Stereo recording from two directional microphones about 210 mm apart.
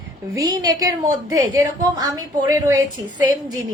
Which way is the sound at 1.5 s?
20° right (ahead or behind).